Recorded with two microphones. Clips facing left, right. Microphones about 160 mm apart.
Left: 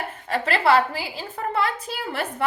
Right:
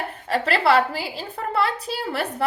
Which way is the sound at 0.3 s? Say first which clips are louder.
Even; 35° right (ahead or behind).